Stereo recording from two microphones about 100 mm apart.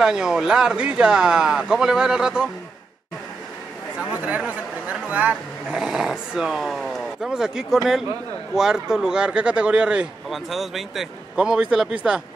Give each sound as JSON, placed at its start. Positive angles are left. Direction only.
{"t": 0.0, "sound": "speech", "side_deg": -5}
{"t": 4.0, "sound": "speech", "side_deg": -15}